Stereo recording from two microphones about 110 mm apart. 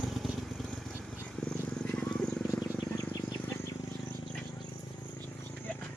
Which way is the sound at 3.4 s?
25° left (ahead or behind).